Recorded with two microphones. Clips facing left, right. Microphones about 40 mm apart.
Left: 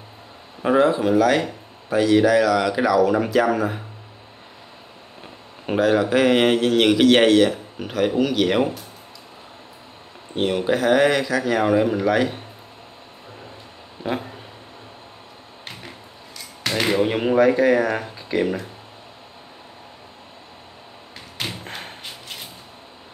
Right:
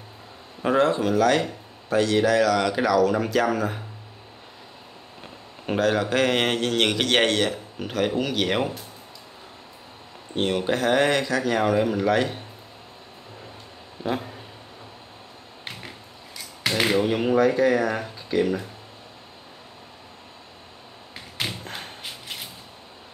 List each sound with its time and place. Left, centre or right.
0.6 s speech: centre
5.2 s speech: centre
10.3 s speech: centre
14.0 s speech: centre
16.6 s a sound: centre
16.9 s speech: left
21.4 s tap: centre